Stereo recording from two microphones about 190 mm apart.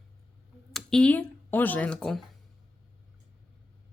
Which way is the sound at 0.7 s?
Centre (ahead or behind).